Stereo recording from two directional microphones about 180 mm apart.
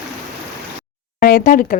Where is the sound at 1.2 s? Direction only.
50° left (ahead or behind).